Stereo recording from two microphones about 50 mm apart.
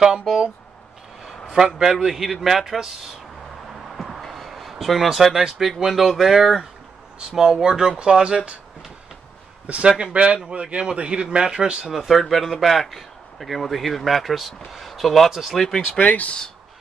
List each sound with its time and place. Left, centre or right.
1.5 s a man's voice: centre
3.9 s a sound: centre
5.6 s a man's voice: centre
9.7 s a man's voice: right
11.8 s a man's voice: centre
16.0 s speech: left